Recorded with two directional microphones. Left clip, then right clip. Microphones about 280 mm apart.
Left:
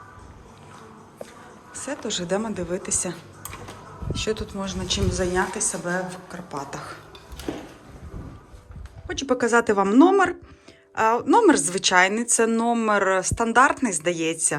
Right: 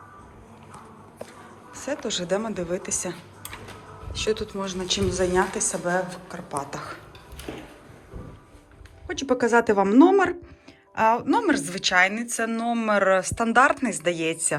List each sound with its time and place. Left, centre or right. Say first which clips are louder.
1.7 s a sound: right 2 dB; centre
2.0 s a woman's voice: left 1 dB; centre
9.0 s a woman's voice: even; centre